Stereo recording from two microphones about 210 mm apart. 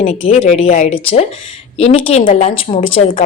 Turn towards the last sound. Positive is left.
turn(degrees=25)  # may be behind; listen again after turning